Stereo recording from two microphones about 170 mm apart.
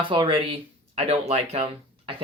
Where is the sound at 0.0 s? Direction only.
30° right (ahead or behind).